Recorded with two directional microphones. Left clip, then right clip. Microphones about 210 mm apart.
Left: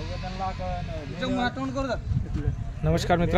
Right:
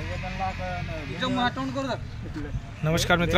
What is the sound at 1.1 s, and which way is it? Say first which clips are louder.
Speech: right 2 dB; 30° left (ahead or behind).